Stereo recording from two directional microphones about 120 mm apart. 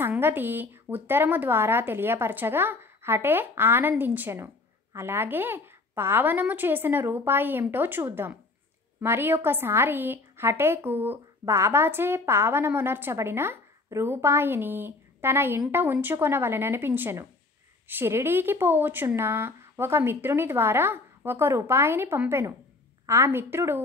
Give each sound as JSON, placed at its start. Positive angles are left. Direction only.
{"t": 0.0, "sound": "a woman's voice", "side_deg": -15}